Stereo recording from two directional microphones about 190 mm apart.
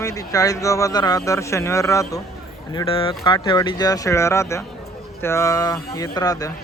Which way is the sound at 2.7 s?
30° left (ahead or behind).